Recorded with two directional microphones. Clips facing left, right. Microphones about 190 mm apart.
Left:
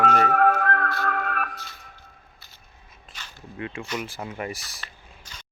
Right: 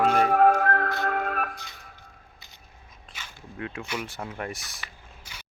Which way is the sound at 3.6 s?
5° right (ahead or behind).